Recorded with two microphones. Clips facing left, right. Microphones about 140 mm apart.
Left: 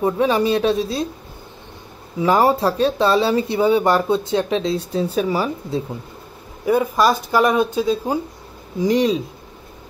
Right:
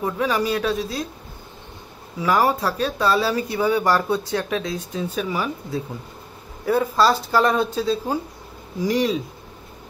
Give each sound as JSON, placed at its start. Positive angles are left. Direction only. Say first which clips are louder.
{"t": 0.0, "sound": "speech", "louder": "left 5 dB", "side_deg": 25}
{"t": 2.2, "sound": "speech", "louder": "left 4 dB", "side_deg": 30}
{"t": 6.6, "sound": "speech", "louder": "left 2 dB", "side_deg": 15}